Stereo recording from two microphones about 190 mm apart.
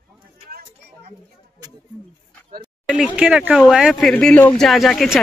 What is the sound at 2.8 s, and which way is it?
Speech, 5° right (ahead or behind).